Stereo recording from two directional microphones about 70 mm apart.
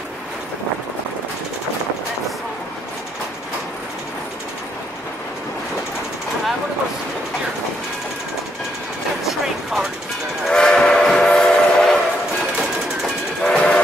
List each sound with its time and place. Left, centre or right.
9.2 s a sound: centre
10.5 s train: centre
13.4 s train: centre